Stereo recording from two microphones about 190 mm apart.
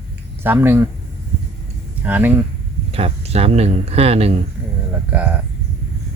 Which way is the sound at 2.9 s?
30° right (ahead or behind).